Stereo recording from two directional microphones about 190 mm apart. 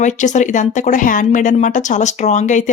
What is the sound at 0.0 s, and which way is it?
Speech, 40° left (ahead or behind).